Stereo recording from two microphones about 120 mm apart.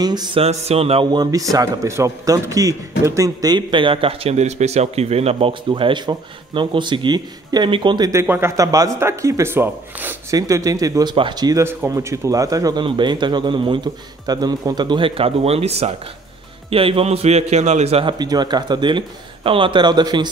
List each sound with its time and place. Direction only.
0.0 s a man's voice: 35° right (ahead or behind)
0.4 s a man's voice: 60° right (ahead or behind)
1.1 s a man's voice: 30° right (ahead or behind); by 5.5 s 60° right (ahead or behind)
5.5 s a man's voice: 45° right (ahead or behind)
8.1 s speech: 20° right (ahead or behind)
10.3 s a man's voice: 30° right (ahead or behind)
11.6 s speech: 20° right (ahead or behind)
12.8 s a man's voice: 40° right (ahead or behind); by 18.0 s 65° right (ahead or behind)
18.0 s a man's voice: 35° right (ahead or behind)